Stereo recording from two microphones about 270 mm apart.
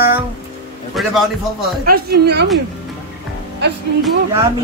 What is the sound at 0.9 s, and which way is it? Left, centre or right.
Speech, centre.